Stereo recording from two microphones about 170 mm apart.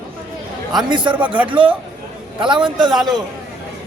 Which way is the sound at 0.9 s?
30° right (ahead or behind).